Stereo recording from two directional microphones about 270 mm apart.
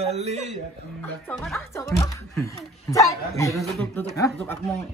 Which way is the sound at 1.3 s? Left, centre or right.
Centre.